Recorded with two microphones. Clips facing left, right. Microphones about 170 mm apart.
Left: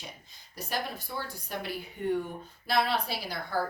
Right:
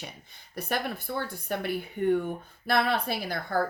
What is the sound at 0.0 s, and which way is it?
Speech, 60° right (ahead or behind).